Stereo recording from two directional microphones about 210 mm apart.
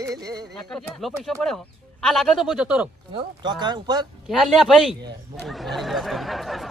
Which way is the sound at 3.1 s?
20° right (ahead or behind).